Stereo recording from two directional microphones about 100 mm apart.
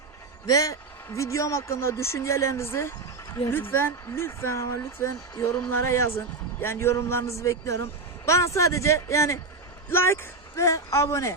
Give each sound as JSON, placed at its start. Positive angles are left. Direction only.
{"t": 0.4, "sound": "speech", "side_deg": 35}
{"t": 5.4, "sound": "speech", "side_deg": 10}
{"t": 5.7, "sound": "speech", "side_deg": 30}